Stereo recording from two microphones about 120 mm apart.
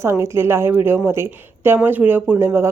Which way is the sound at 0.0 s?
25° right (ahead or behind).